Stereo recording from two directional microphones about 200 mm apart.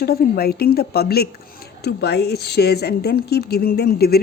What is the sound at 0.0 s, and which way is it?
Speech, 50° left (ahead or behind).